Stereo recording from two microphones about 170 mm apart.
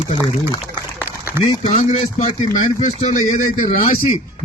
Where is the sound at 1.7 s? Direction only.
40° left (ahead or behind).